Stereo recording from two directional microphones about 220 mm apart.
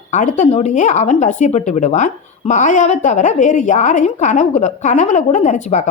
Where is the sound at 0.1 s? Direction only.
35° left (ahead or behind).